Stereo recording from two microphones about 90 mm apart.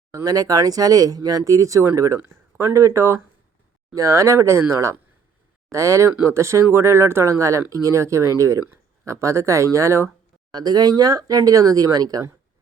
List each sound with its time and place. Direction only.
0.1 s speech: 40° right (ahead or behind)
10.5 s speech: 45° right (ahead or behind)